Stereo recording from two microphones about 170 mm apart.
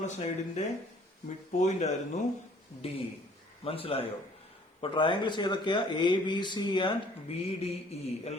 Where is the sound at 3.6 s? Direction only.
35° left (ahead or behind).